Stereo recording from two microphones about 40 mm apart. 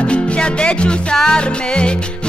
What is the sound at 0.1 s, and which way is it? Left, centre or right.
Music, left.